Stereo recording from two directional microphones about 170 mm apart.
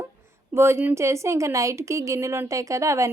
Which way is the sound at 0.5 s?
15° right (ahead or behind).